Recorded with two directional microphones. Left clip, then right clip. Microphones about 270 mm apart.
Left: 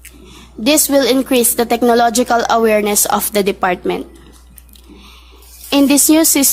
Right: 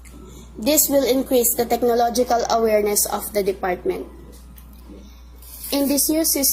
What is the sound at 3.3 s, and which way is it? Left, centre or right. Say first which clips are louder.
Speech: left 3 dB; left.